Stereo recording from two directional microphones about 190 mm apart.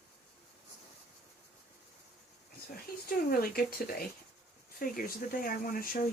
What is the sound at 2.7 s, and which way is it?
Speech, 50° left (ahead or behind).